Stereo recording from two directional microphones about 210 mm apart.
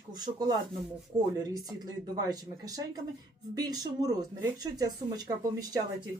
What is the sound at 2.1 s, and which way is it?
Speech, 20° right (ahead or behind).